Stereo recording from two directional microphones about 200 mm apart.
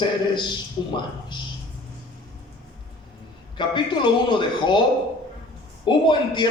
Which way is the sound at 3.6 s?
25° left (ahead or behind).